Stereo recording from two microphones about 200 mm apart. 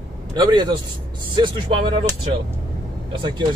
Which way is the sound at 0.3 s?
20° right (ahead or behind).